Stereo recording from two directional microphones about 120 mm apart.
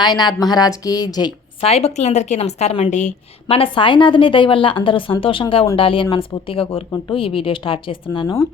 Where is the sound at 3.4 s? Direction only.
50° left (ahead or behind).